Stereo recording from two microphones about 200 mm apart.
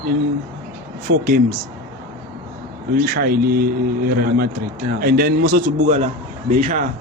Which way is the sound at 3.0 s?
50° right (ahead or behind).